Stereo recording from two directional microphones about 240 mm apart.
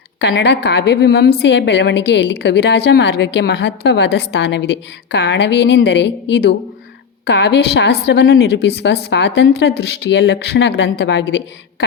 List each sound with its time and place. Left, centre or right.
0.2 s a woman's voice: left